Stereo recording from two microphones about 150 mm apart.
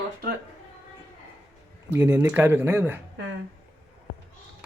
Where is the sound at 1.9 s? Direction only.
15° right (ahead or behind).